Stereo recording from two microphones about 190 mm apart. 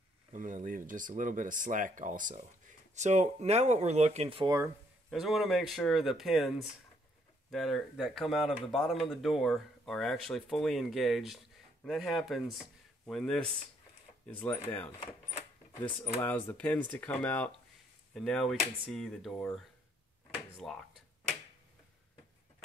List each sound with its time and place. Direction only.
0.3 s speech: 45° right (ahead or behind)
5.1 s speech: centre (ahead or behind)
20.6 s speech: centre (ahead or behind)